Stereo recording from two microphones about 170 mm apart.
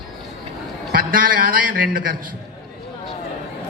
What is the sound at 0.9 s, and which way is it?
A man's voice, 55° right (ahead or behind).